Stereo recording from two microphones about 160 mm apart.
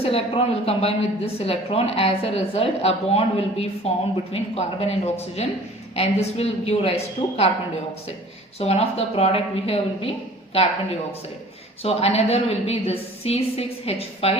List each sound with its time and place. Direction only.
0.0 s a woman's voice: 35° left (ahead or behind)
8.5 s a woman's voice: 40° left (ahead or behind)
11.8 s a woman's voice: 40° left (ahead or behind)